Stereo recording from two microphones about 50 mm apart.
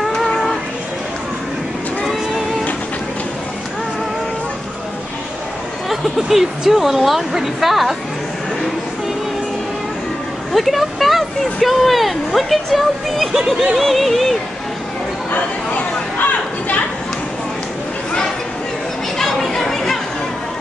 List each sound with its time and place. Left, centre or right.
0.0 s child singing: centre
5.9 s speech: centre
10.5 s speech: centre
16.3 s a sound: left
19.1 s chatter: centre